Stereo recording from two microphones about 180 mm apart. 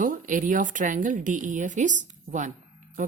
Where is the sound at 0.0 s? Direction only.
45° right (ahead or behind).